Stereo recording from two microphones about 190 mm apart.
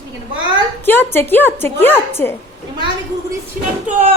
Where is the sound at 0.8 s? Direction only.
10° left (ahead or behind).